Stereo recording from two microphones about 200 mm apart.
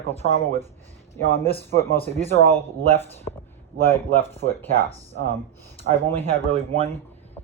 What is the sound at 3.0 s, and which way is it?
Speech, 10° left (ahead or behind).